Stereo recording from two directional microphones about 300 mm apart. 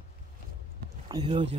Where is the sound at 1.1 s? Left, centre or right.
Centre.